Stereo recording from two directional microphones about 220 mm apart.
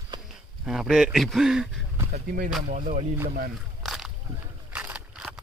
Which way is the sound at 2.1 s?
40° right (ahead or behind).